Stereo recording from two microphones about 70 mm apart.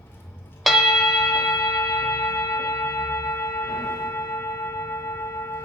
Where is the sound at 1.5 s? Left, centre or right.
Left.